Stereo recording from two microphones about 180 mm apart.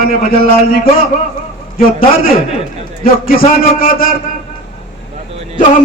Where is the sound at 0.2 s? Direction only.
50° left (ahead or behind).